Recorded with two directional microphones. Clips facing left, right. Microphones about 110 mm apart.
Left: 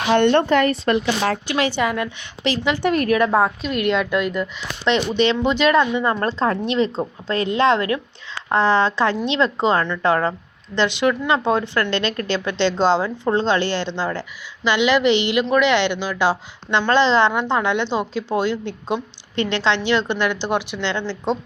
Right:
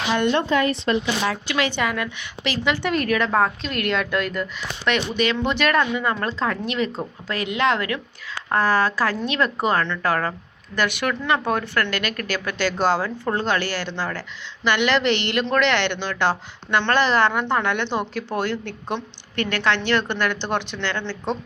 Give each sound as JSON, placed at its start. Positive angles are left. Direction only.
{"t": 0.1, "sound": "a woman's voice", "side_deg": 60}
{"t": 1.7, "sound": "a woman's voice", "side_deg": 20}
{"t": 2.8, "sound": "speech", "side_deg": 45}
{"t": 3.1, "sound": "a woman's voice", "side_deg": 15}